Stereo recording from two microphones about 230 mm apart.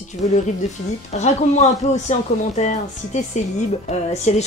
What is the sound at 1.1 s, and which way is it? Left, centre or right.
Speech, left.